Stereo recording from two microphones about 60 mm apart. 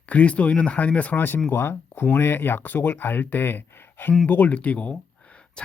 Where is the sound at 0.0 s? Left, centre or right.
Left.